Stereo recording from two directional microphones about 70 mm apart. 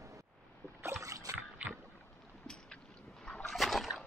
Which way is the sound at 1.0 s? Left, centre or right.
Right.